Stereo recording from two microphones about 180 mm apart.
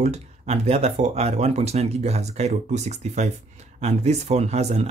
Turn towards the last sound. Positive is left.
turn(degrees=-35)  # may be behind; listen again after turning